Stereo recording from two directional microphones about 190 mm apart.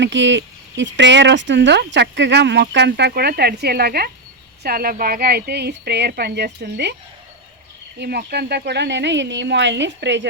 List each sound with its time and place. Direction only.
0.0 s speech: 70° right (ahead or behind)
7.9 s speech: 60° right (ahead or behind)